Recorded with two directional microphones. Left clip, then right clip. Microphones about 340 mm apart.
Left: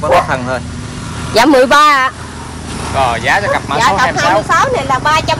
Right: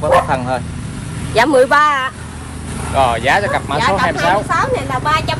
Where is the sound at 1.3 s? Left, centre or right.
Left.